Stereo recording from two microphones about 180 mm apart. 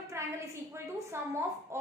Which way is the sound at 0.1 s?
15° right (ahead or behind).